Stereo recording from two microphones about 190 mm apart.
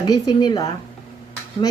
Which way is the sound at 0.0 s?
20° left (ahead or behind).